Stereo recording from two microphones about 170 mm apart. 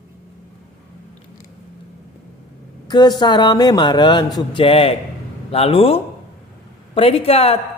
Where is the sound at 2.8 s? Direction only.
25° left (ahead or behind).